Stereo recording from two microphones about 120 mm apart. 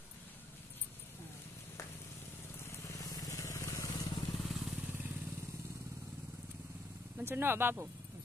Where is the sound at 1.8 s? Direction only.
25° left (ahead or behind).